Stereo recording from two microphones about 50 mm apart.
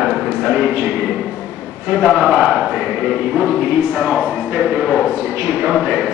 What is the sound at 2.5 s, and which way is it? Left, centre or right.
A man's voice, centre.